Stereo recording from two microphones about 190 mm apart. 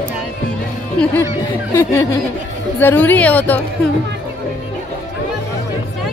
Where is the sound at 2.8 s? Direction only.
10° left (ahead or behind).